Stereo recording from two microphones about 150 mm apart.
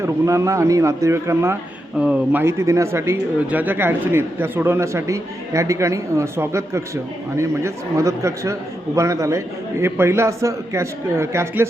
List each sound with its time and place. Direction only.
0.0 s a man's voice: 20° right (ahead or behind)